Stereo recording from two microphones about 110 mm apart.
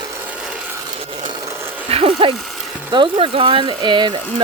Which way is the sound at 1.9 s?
55° right (ahead or behind).